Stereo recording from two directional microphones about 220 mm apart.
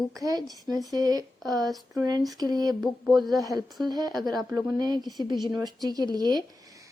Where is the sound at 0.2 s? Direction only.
15° right (ahead or behind).